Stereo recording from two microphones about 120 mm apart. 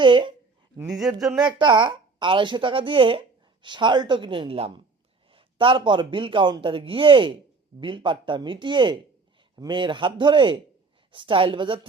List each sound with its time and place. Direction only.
0.0 s speech: 40° right (ahead or behind)
0.9 s speech: centre (ahead or behind)
1.5 s a woman's voice: 45° right (ahead or behind)